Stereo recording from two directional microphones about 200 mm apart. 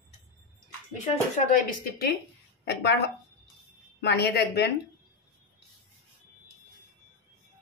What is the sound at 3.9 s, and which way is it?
Speech, 55° left (ahead or behind).